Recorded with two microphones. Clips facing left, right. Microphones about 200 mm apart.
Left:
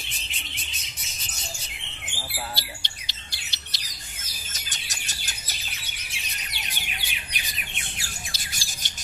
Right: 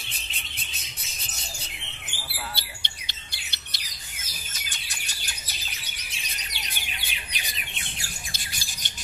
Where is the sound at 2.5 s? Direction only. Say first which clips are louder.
Left 3 dB; 55° right (ahead or behind).